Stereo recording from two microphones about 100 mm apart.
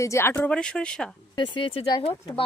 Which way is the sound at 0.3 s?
10° left (ahead or behind).